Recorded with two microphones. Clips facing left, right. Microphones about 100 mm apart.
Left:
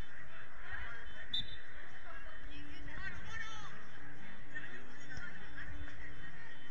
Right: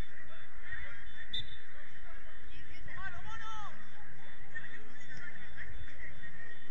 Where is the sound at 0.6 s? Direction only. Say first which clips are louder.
Even; 60° left (ahead or behind).